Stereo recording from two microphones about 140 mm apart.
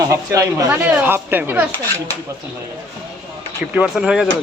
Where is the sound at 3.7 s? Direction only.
5° right (ahead or behind).